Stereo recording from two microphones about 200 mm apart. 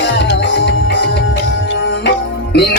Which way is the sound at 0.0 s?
60° left (ahead or behind).